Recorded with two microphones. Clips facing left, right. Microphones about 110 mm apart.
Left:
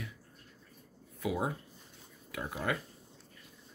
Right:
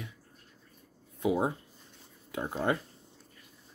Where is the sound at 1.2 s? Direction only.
25° right (ahead or behind).